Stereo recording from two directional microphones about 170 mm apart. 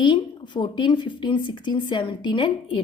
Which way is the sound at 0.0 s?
25° left (ahead or behind).